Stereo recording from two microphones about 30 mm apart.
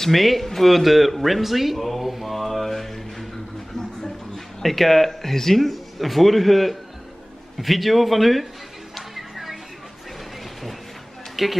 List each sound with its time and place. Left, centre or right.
0.0 s speech: centre
0.7 s a sound: centre
3.7 s a sound: centre
4.6 s speech: centre
8.9 s music: centre
11.4 s speech: centre